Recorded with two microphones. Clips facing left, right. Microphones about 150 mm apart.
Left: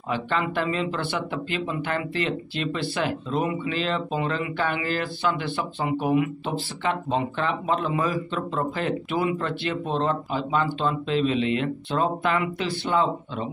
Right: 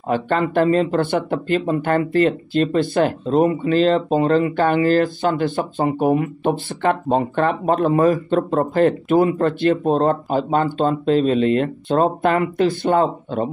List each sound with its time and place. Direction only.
0.1 s speech: 45° right (ahead or behind)